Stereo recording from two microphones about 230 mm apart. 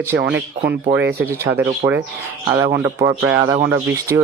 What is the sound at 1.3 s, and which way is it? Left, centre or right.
Speech, centre.